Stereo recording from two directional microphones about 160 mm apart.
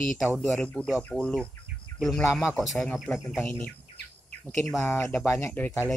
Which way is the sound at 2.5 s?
15° left (ahead or behind).